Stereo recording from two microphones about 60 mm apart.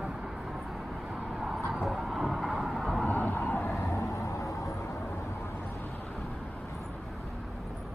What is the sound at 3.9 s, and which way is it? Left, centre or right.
Vehicle, left.